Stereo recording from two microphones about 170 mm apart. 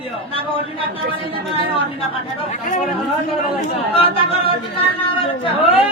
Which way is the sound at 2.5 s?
50° left (ahead or behind).